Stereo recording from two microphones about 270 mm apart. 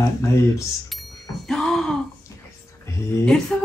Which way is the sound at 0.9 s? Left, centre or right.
Centre.